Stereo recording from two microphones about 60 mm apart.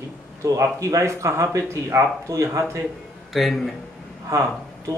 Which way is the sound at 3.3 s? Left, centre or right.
Centre.